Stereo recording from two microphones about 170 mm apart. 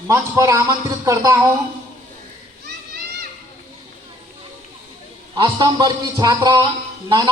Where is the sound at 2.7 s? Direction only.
70° right (ahead or behind).